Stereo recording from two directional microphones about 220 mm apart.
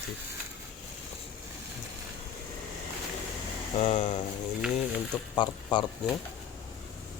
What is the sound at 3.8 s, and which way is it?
Speech, 30° left (ahead or behind).